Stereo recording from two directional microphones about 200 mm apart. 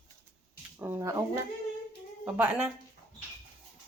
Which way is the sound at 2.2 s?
5° right (ahead or behind).